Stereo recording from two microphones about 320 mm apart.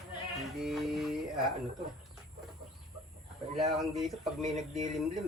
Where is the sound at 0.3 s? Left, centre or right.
Centre.